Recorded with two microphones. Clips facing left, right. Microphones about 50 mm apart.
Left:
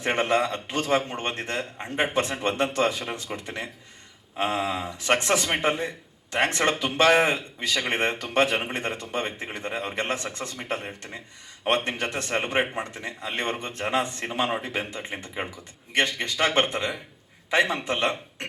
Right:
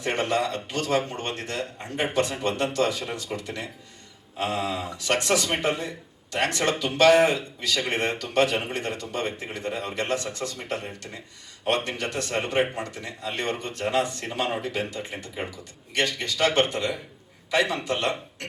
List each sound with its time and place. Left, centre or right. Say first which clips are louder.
0.0 s a man's voice: left 2 dB; left